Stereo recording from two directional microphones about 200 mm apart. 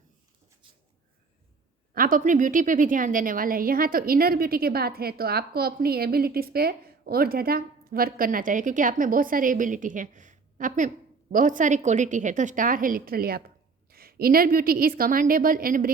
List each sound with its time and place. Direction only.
1.9 s speech: 45° right (ahead or behind)